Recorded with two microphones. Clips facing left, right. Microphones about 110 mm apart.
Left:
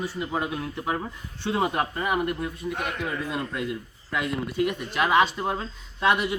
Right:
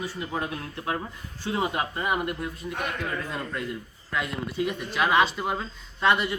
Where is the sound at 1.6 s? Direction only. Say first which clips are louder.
Left 2 dB; 55° left (ahead or behind).